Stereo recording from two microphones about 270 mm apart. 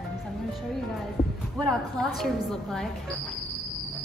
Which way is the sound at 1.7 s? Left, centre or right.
Centre.